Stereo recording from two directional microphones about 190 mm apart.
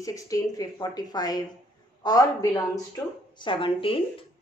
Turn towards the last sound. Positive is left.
turn(degrees=30)  # may be behind; listen again after turning